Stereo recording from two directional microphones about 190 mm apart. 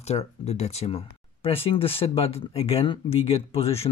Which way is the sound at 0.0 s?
35° left (ahead or behind).